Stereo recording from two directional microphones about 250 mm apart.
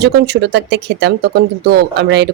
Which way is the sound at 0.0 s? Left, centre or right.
Right.